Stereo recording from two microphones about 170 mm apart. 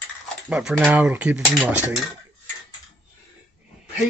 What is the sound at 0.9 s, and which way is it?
Speech, 10° right (ahead or behind).